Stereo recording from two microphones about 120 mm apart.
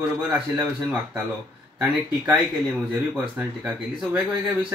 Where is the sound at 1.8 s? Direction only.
10° right (ahead or behind).